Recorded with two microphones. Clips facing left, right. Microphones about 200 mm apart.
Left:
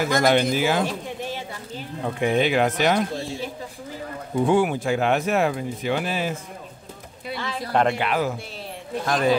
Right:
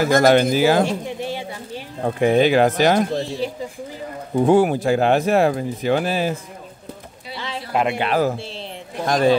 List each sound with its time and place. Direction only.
0.0 s speech: 40° right (ahead or behind)
2.0 s speech: 40° right (ahead or behind)
4.4 s speech: 40° right (ahead or behind)
8.0 s speech: 40° right (ahead or behind)